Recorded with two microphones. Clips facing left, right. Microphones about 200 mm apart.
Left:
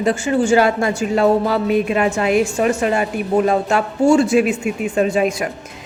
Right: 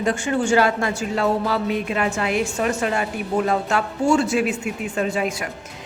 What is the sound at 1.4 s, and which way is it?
A woman's voice, 20° left (ahead or behind).